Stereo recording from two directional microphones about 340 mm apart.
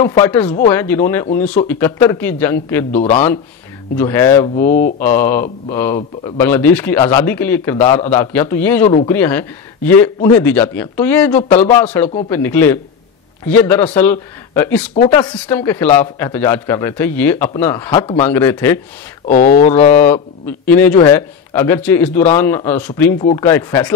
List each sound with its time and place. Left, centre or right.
0.2 s a man's voice: centre
3.9 s a man's voice: centre
4.6 s speech: left
5.0 s a man's voice: centre
18.3 s a man's voice: centre
19.2 s speech: left
19.9 s a man's voice: centre